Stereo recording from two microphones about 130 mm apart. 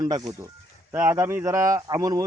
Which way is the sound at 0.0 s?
30° right (ahead or behind).